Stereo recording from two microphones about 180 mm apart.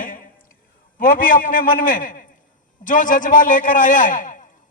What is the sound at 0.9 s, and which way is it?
A man's voice, 50° left (ahead or behind).